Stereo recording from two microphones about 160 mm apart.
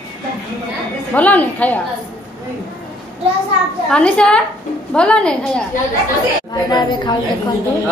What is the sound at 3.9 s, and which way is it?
A woman's voice, 5° left (ahead or behind).